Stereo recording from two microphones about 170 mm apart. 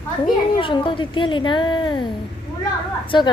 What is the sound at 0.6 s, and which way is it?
Speech, 30° left (ahead or behind).